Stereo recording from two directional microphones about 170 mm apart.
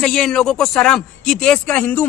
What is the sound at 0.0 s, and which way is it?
Speech, centre (ahead or behind).